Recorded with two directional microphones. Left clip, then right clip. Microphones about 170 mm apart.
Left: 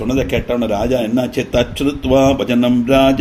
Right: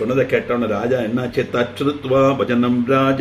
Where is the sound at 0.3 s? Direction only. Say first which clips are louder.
Left 1 dB; 70° left (ahead or behind).